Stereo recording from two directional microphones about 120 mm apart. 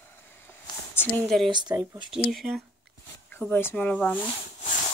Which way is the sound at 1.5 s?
35° right (ahead or behind).